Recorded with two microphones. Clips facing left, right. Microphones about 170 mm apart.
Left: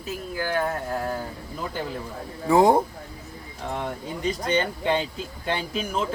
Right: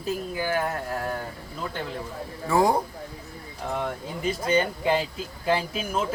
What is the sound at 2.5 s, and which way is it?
Speech, 20° left (ahead or behind).